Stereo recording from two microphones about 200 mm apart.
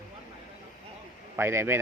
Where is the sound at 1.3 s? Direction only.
10° right (ahead or behind).